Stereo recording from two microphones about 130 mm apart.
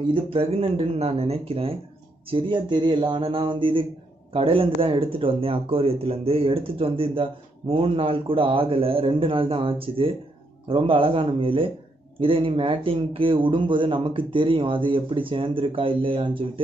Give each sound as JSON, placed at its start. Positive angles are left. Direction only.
{"t": 0.1, "sound": "a man's voice", "side_deg": -45}
{"t": 2.3, "sound": "a man's voice", "side_deg": -40}